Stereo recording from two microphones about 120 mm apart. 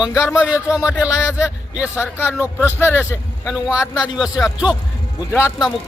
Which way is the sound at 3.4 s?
5° right (ahead or behind).